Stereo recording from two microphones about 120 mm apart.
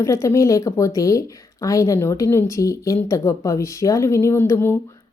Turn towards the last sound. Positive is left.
turn(degrees=20)  # may be behind; listen again after turning